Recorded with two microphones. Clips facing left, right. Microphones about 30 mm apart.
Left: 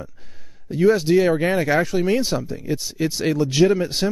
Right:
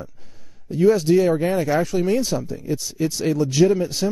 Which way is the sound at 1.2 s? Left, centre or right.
Left.